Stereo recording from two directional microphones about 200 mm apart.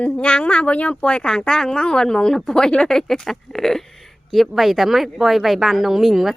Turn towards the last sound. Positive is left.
turn(degrees=0)  # may be behind; listen again after turning